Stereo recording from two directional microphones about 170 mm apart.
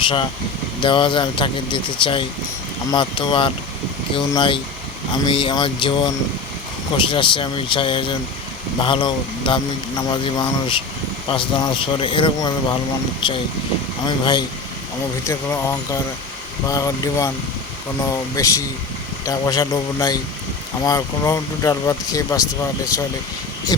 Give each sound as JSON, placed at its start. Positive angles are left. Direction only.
{"t": 0.0, "sound": "speech", "side_deg": 30}
{"t": 6.9, "sound": "speech", "side_deg": 30}
{"t": 15.3, "sound": "speech", "side_deg": 15}
{"t": 18.4, "sound": "speech", "side_deg": 20}